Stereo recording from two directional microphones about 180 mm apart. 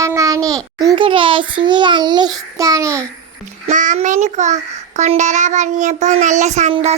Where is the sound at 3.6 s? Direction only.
45° right (ahead or behind).